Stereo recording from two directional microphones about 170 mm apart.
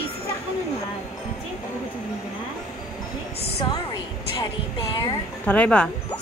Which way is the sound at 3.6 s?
25° left (ahead or behind).